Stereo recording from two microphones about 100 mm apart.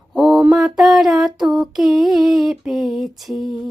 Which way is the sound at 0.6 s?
Centre (ahead or behind).